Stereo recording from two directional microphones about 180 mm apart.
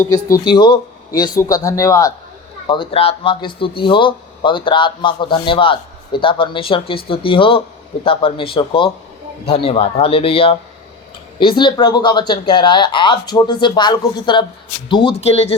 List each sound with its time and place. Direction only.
0.0 s a man's voice: 20° left (ahead or behind); by 15.5 s 35° left (ahead or behind)